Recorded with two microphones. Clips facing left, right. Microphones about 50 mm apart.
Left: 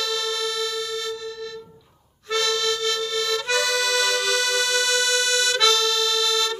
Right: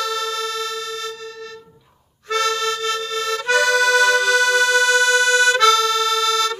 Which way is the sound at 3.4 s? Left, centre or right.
Right.